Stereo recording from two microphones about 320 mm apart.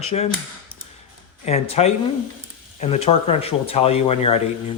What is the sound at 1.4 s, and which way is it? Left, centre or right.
Speech, centre.